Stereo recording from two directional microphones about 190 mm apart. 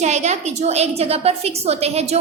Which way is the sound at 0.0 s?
35° right (ahead or behind).